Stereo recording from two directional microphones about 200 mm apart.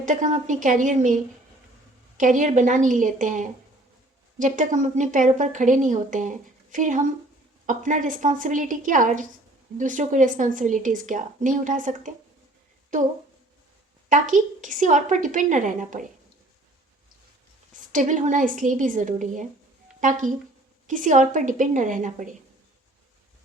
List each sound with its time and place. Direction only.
0.0 s a woman's voice: 40° right (ahead or behind)
14.1 s a woman's voice: 40° right (ahead or behind)
17.9 s a woman's voice: 40° right (ahead or behind)